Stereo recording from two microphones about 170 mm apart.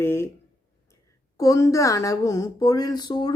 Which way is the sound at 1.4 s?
20° left (ahead or behind).